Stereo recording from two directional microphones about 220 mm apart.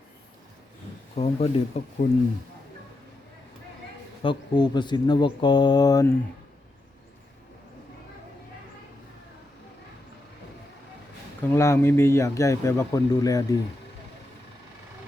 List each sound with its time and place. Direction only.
1.1 s speech: 30° left (ahead or behind)
2.0 s a man's voice: 45° left (ahead or behind)
4.2 s speech: 20° left (ahead or behind)
11.4 s speech: 10° left (ahead or behind)